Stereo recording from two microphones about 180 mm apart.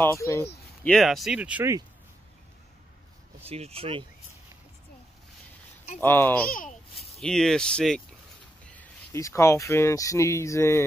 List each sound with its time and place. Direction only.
0.0 s speech: 15° left (ahead or behind)
0.8 s speech: centre (ahead or behind); by 1.9 s 15° right (ahead or behind)
3.4 s speech: 35° right (ahead or behind)
5.9 s speech: 10° left (ahead or behind)